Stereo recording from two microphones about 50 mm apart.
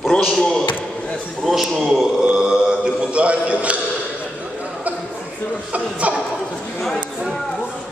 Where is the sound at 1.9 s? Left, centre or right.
Centre.